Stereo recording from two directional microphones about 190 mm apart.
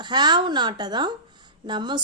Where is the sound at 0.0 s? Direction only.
25° right (ahead or behind).